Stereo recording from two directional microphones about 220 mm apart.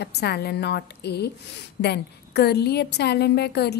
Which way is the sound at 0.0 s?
45° left (ahead or behind).